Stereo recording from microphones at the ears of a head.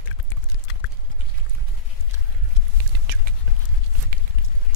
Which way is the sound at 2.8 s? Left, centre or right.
Right.